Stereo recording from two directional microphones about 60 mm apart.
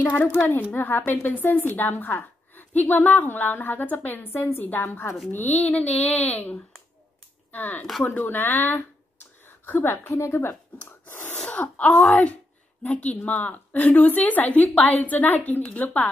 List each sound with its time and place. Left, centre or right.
0.0 s a woman's voice: left
0.4 s speech: left
0.7 s a woman's voice: left
10.5 s a sound: left
11.4 s a woman's voice: left